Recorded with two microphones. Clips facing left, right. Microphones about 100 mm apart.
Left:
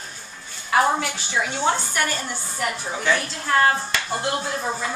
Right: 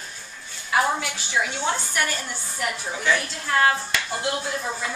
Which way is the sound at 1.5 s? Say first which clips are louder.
Left 4 dB; 35° left (ahead or behind).